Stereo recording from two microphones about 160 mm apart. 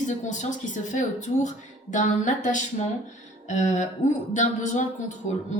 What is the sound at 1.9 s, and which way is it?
A woman's voice, 50° left (ahead or behind).